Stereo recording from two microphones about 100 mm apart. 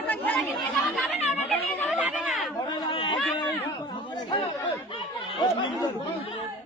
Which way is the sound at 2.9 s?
55° left (ahead or behind).